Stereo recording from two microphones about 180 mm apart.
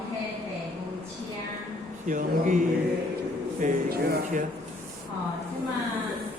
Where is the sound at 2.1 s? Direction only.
45° right (ahead or behind).